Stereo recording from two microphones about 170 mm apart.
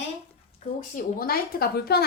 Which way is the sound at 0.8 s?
55° left (ahead or behind).